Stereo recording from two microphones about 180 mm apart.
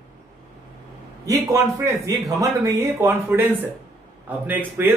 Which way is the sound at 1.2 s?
15° right (ahead or behind).